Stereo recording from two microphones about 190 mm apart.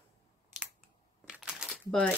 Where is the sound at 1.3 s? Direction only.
Centre (ahead or behind).